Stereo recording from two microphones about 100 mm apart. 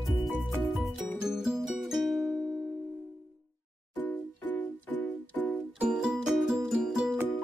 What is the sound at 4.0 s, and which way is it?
Music, 15° left (ahead or behind).